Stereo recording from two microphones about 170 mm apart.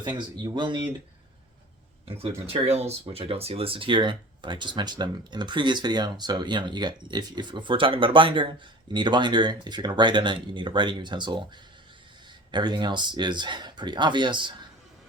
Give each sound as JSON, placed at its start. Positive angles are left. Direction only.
{"t": 0.5, "sound": "speech", "side_deg": -25}
{"t": 2.0, "sound": "speech", "side_deg": -35}
{"t": 12.5, "sound": "speech", "side_deg": -25}